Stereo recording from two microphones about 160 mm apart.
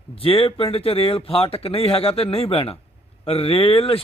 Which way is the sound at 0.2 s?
35° left (ahead or behind).